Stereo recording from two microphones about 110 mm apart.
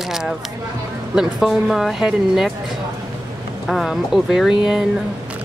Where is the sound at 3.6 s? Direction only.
Centre (ahead or behind).